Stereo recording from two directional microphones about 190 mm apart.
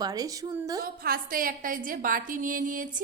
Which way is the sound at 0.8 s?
50° right (ahead or behind).